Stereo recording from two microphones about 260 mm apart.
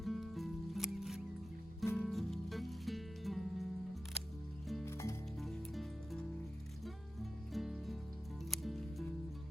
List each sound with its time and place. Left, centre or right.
0.0 s music: centre
4.7 s music: centre
7.5 s music: centre
8.4 s scissors: centre